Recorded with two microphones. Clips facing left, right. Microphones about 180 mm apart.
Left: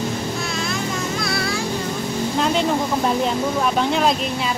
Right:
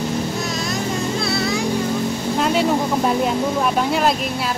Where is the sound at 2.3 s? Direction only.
5° right (ahead or behind).